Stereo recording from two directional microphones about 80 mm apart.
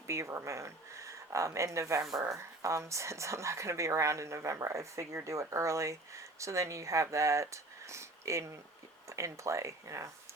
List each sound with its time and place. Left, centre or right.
0.1 s speech: right